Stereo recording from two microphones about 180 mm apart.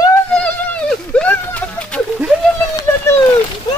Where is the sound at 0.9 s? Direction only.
5° left (ahead or behind).